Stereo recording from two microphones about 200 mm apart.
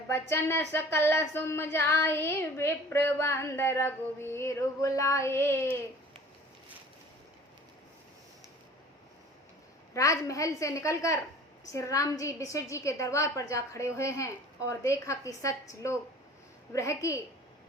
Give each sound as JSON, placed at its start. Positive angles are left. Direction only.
{"t": 0.1, "sound": "speech", "side_deg": 10}
{"t": 9.9, "sound": "speech", "side_deg": 15}